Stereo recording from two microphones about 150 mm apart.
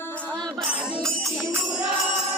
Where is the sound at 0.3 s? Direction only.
5° left (ahead or behind).